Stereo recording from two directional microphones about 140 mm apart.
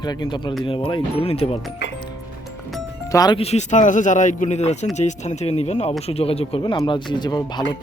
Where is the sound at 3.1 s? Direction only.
25° left (ahead or behind).